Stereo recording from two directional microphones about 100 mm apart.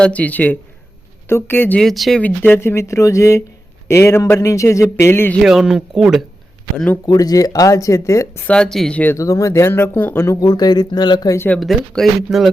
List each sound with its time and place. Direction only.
0.0 s speech: 15° left (ahead or behind)
1.8 s speech: centre (ahead or behind)
2.2 s speech: 20° left (ahead or behind)
5.4 s speech: 5° right (ahead or behind)
7.0 s speech: 40° left (ahead or behind)
8.4 s speech: 10° left (ahead or behind)
9.1 s speech: 30° left (ahead or behind)
10.4 s speech: 45° left (ahead or behind)
11.3 s speech: 15° left (ahead or behind)
11.6 s speech: centre (ahead or behind)